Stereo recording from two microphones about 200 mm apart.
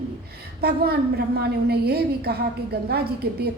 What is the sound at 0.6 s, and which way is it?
A woman's voice, 50° right (ahead or behind).